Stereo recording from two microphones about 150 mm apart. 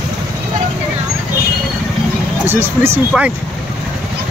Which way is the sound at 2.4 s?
15° right (ahead or behind).